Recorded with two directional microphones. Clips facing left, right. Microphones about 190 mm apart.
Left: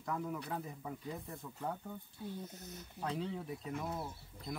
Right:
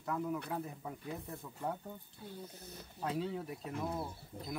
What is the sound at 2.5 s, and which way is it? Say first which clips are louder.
Speech: left 1 dB; 30° right (ahead or behind).